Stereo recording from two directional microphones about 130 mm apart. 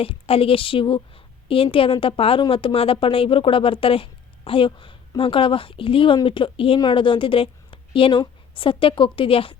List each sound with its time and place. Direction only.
0.0 s a woman's voice: 45° left (ahead or behind)